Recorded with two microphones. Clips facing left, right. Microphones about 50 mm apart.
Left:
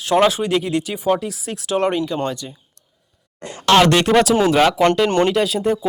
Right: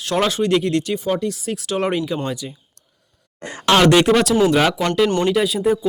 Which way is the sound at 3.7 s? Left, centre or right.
Centre.